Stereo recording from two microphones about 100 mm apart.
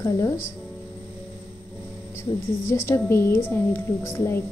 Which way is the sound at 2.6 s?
25° left (ahead or behind).